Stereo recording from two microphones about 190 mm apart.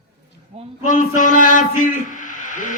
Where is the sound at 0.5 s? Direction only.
30° right (ahead or behind).